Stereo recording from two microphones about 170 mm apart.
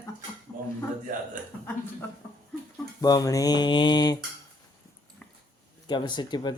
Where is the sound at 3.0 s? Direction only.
20° left (ahead or behind).